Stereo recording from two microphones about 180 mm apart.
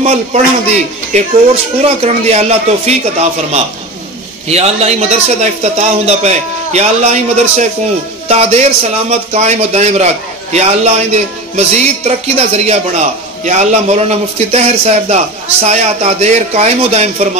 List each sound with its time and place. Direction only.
0.0 s a man's voice: 40° right (ahead or behind)